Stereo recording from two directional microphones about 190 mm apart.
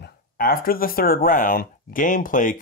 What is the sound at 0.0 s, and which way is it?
Speech, 50° left (ahead or behind).